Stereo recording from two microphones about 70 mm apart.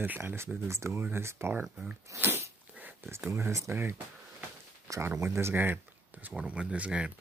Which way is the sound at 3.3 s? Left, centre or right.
Right.